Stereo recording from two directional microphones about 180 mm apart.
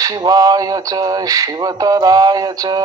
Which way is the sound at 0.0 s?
20° right (ahead or behind).